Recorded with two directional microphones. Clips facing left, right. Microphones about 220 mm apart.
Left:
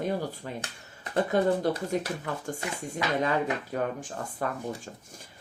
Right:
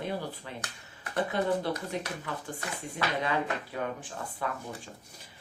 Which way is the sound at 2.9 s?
45° left (ahead or behind).